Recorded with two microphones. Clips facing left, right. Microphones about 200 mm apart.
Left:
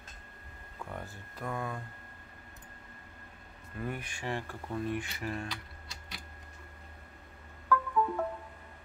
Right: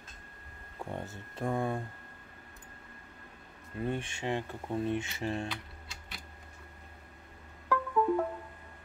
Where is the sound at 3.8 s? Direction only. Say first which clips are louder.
Right 4 dB; 25° right (ahead or behind).